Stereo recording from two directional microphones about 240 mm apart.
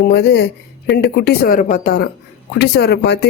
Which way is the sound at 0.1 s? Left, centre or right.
Left.